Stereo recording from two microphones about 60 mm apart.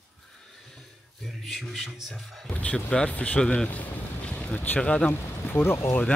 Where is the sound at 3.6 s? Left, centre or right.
Left.